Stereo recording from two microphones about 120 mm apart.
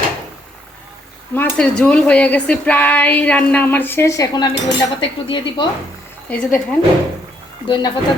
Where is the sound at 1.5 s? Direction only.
10° left (ahead or behind); by 4.5 s 30° left (ahead or behind).